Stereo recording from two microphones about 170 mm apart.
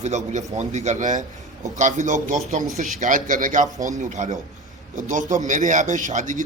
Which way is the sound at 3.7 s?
20° right (ahead or behind).